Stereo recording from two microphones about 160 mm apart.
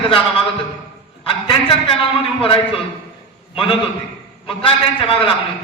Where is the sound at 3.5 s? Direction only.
35° left (ahead or behind).